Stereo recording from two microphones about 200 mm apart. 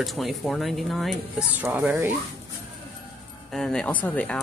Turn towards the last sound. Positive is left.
turn(degrees=5)  # may be behind; listen again after turning